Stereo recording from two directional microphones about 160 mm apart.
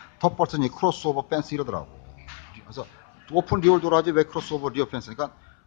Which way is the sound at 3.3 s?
25° left (ahead or behind).